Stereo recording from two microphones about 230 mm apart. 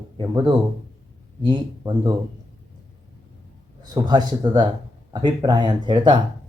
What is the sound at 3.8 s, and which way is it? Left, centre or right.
Speech, centre.